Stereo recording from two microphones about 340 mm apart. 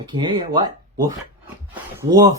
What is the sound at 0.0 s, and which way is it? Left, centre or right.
Speech, centre.